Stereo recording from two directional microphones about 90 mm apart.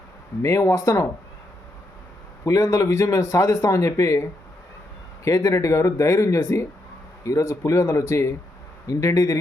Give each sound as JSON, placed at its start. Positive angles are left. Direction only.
{"t": 0.4, "sound": "speech", "side_deg": 35}
{"t": 2.4, "sound": "speech", "side_deg": 35}